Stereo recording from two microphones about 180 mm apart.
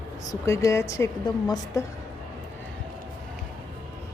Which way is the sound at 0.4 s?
15° left (ahead or behind).